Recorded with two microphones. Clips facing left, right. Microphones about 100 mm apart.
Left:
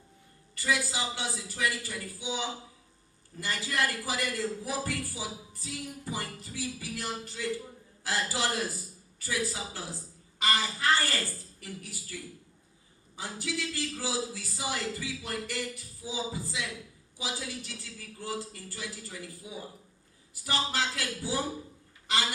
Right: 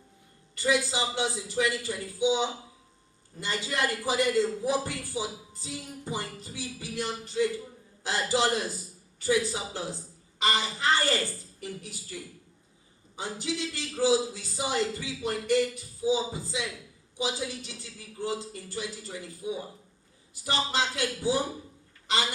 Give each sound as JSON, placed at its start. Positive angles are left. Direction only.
{"t": 0.5, "sound": "a man's voice", "side_deg": -20}
{"t": 13.1, "sound": "a man's voice", "side_deg": -20}
{"t": 22.0, "sound": "a sound", "side_deg": -20}